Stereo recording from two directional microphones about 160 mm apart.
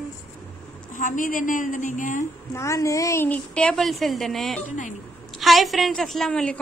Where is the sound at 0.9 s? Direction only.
55° left (ahead or behind).